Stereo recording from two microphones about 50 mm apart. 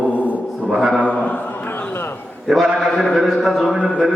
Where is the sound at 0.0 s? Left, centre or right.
Right.